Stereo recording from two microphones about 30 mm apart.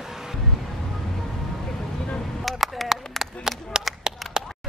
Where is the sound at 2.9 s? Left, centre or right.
Centre.